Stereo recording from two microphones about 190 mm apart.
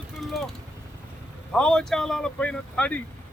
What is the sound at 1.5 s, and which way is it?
Speech, 5° left (ahead or behind).